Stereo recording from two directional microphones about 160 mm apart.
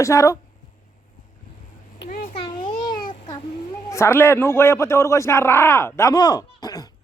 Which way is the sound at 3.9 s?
15° left (ahead or behind).